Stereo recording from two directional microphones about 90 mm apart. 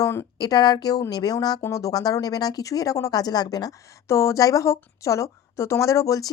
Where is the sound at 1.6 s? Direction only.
40° left (ahead or behind).